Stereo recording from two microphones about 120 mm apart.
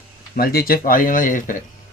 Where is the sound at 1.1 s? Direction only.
90° left.